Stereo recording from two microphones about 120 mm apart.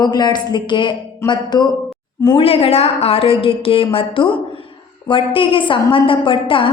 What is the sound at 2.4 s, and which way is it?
A woman's voice, 55° left (ahead or behind).